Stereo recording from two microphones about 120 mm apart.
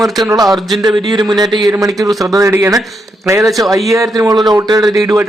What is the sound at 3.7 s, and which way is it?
A man's voice, 25° right (ahead or behind).